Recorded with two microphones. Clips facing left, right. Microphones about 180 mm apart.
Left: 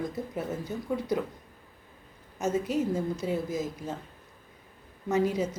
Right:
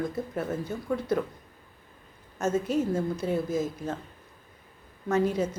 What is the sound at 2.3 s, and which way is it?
Speech, 15° left (ahead or behind).